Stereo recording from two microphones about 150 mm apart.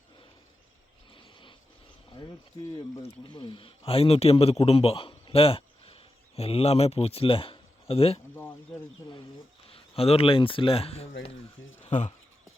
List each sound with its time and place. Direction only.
1.1 s a sound: 35° left (ahead or behind)
2.1 s speech: 30° left (ahead or behind)
9.6 s speech: 40° left (ahead or behind)
11.9 s speech: 55° left (ahead or behind)